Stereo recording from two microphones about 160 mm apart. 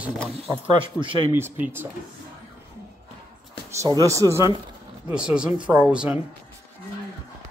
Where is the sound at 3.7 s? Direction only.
20° right (ahead or behind).